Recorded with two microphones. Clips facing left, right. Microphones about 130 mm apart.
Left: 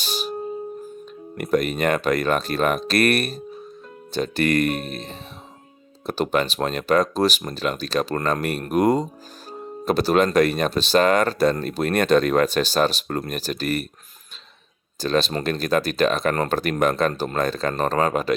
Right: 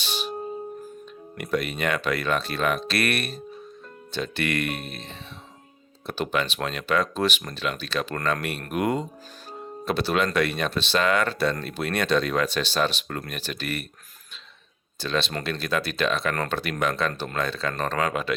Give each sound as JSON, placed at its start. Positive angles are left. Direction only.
{"t": 0.0, "sound": "music", "side_deg": 40}
{"t": 1.4, "sound": "speech", "side_deg": 45}
{"t": 9.5, "sound": "music", "side_deg": 40}
{"t": 10.3, "sound": "speech", "side_deg": 40}
{"t": 14.9, "sound": "speech", "side_deg": 40}